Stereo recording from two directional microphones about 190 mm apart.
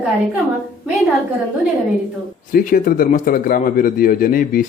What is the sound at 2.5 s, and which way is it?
A man's voice, 45° left (ahead or behind).